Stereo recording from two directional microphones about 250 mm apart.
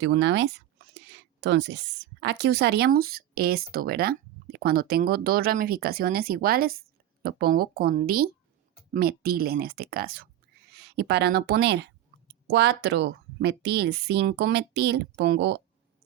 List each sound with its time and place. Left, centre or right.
0.0 s a woman's voice: right